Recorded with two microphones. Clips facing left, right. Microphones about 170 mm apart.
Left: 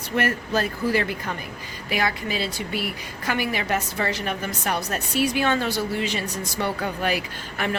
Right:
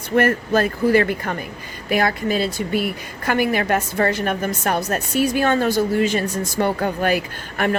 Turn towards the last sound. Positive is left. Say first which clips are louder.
# right 6 dB
turn(degrees=-50)  # may be behind; listen again after turning